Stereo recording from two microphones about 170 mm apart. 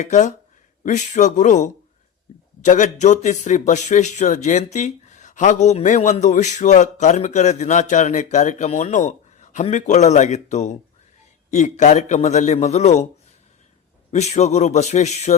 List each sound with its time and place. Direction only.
0.0 s a man's voice: 45° left (ahead or behind)
14.1 s a man's voice: 40° left (ahead or behind)